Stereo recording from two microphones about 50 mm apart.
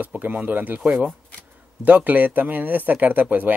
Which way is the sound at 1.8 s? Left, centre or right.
Right.